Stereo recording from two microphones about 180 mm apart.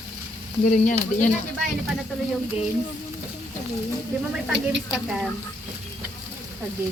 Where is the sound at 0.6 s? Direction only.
45° left (ahead or behind).